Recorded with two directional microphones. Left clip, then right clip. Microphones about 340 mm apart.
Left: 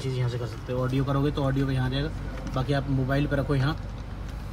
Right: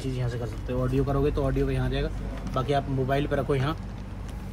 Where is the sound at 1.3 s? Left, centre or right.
Right.